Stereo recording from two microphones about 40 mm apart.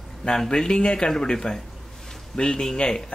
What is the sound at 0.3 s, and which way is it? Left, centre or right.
Speech, centre.